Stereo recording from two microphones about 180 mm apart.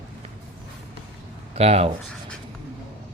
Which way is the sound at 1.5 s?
35° right (ahead or behind).